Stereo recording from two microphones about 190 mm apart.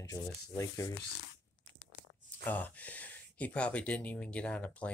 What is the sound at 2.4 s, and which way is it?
Speech, 10° left (ahead or behind).